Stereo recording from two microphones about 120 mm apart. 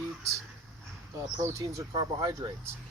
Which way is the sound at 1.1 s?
25° right (ahead or behind).